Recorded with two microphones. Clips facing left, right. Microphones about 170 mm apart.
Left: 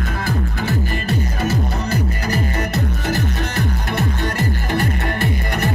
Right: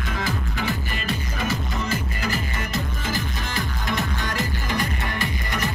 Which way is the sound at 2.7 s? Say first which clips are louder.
Left 6 dB; 70° left (ahead or behind).